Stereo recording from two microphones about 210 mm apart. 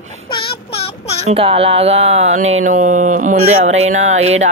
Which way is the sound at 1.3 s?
25° right (ahead or behind).